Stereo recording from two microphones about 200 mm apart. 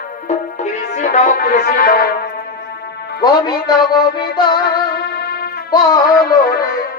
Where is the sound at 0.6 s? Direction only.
35° left (ahead or behind).